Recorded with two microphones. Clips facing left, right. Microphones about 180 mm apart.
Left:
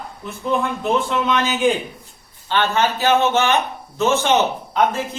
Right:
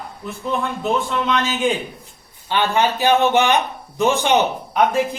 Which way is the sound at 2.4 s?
15° right (ahead or behind).